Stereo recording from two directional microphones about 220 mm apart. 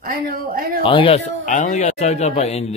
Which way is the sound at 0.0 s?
45° right (ahead or behind).